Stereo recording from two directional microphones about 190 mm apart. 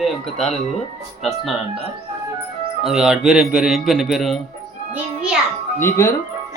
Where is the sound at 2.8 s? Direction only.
5° right (ahead or behind).